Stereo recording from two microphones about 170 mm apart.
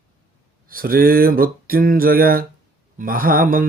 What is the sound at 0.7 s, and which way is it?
Speech, 60° right (ahead or behind).